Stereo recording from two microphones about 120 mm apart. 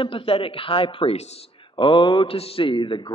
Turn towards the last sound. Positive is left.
turn(degrees=40)  # may be behind; listen again after turning